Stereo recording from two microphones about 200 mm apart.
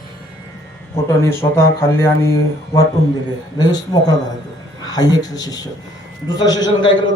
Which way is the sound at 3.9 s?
20° left (ahead or behind).